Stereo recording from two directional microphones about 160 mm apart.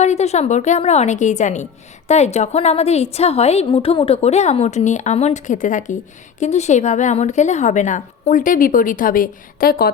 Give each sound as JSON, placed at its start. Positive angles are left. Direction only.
{"t": 0.0, "sound": "a woman's voice", "side_deg": 45}